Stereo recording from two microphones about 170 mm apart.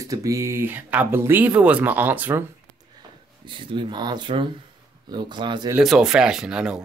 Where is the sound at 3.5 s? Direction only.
30° right (ahead or behind).